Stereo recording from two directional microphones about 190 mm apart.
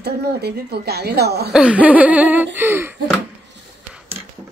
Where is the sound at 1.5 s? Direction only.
5° right (ahead or behind).